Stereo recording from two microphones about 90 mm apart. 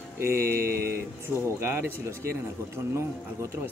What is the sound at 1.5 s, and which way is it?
Speech, 25° right (ahead or behind).